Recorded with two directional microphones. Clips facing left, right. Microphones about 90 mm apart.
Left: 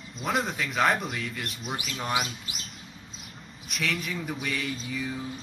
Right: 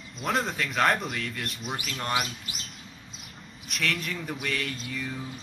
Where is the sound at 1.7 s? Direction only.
15° left (ahead or behind).